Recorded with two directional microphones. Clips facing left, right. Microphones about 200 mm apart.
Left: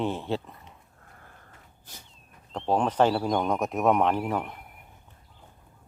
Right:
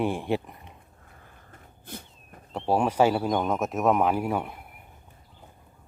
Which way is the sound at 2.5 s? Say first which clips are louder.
Right 1 dB; 10° right (ahead or behind).